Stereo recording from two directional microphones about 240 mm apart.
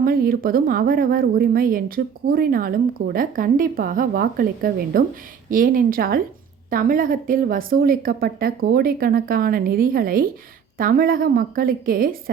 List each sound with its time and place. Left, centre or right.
0.0 s a woman's voice: right